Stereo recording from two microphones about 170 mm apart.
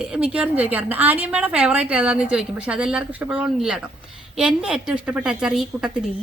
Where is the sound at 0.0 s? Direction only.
5° right (ahead or behind).